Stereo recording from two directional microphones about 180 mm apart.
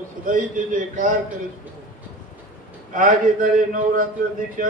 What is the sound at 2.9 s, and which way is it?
Speech, 50° right (ahead or behind).